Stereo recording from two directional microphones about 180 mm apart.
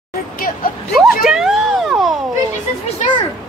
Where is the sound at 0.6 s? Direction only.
55° left (ahead or behind).